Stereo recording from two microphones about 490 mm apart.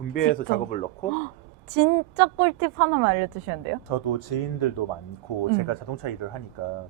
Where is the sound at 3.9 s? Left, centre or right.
Left.